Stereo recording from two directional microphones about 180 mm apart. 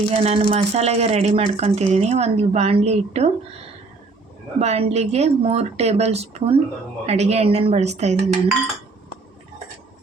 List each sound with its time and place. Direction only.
0.1 s speech: 35° right (ahead or behind)
4.6 s speech: 35° right (ahead or behind)